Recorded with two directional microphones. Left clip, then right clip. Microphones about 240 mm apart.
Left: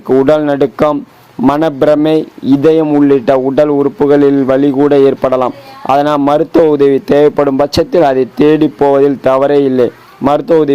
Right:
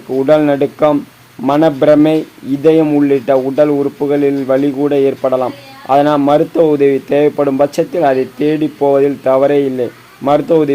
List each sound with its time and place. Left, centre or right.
0.2 s a man's voice: left